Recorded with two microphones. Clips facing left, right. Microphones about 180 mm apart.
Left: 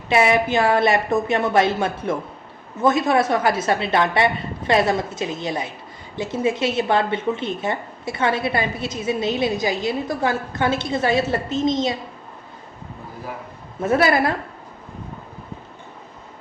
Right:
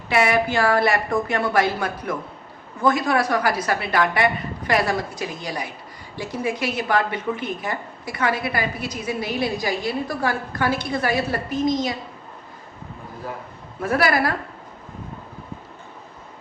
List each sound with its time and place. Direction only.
0.1 s a woman's voice: 20° left (ahead or behind)
13.8 s a woman's voice: 25° left (ahead or behind)